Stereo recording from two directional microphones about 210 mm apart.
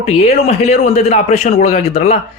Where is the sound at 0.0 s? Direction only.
30° left (ahead or behind).